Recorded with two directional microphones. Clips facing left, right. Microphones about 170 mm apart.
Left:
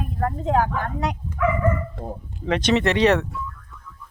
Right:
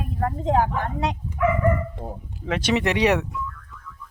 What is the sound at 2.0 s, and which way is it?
A woman's voice, 5° right (ahead or behind).